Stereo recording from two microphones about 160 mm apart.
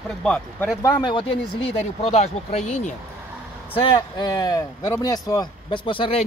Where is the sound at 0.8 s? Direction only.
25° left (ahead or behind).